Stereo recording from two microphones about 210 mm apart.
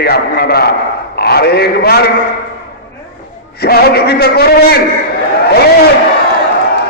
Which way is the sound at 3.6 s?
50° left (ahead or behind).